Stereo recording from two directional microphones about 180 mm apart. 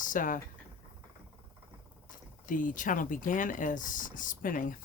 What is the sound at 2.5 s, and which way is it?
Speech, 50° left (ahead or behind).